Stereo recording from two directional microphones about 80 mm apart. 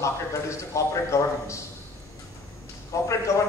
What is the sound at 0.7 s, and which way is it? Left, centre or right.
Speech, left.